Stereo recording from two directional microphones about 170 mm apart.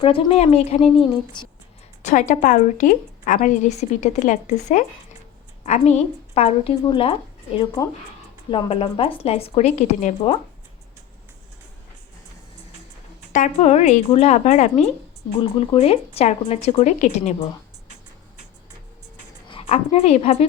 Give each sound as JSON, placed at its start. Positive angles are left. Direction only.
{"t": 0.0, "sound": "speech", "side_deg": 35}
{"t": 2.0, "sound": "a woman's voice", "side_deg": 45}
{"t": 13.3, "sound": "speech", "side_deg": 45}
{"t": 19.5, "sound": "a woman's voice", "side_deg": 35}